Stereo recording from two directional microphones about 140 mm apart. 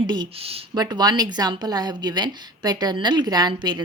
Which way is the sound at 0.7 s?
30° right (ahead or behind).